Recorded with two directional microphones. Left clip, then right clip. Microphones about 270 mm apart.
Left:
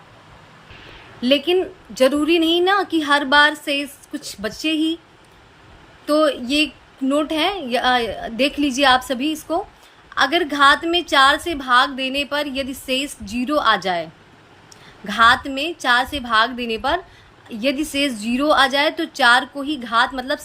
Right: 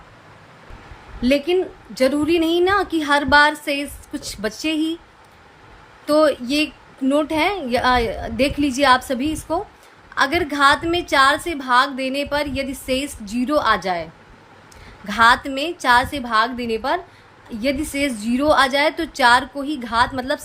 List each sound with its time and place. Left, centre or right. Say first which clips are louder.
1.2 s a woman's voice: left 1 dB; centre
6.1 s a woman's voice: right 1 dB; centre